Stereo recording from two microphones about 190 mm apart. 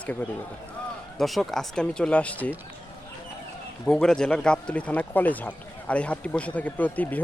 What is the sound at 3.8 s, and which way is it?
Speech, 5° left (ahead or behind).